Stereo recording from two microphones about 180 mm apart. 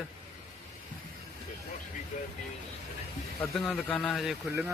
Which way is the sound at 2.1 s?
45° left (ahead or behind).